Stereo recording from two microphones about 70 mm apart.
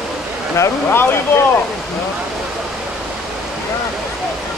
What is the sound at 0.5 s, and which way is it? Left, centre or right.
Speech, left.